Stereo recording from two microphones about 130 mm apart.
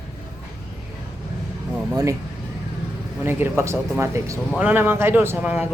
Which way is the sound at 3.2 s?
20° right (ahead or behind).